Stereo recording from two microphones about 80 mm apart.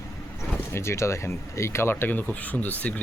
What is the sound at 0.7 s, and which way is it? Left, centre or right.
Speech, left.